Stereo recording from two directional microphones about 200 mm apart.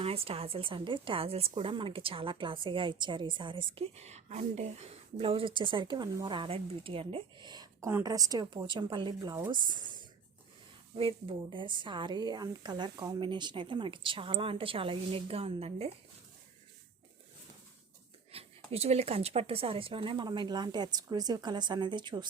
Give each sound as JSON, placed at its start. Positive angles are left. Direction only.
{"t": 0.0, "sound": "a woman's voice", "side_deg": -30}
{"t": 18.3, "sound": "a woman's voice", "side_deg": -30}